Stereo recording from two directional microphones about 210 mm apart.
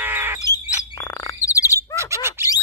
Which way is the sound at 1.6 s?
15° right (ahead or behind).